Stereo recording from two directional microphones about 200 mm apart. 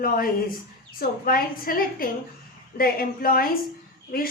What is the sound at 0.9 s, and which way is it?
Speech, 45° left (ahead or behind).